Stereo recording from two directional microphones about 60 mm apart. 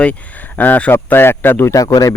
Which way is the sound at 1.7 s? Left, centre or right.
Left.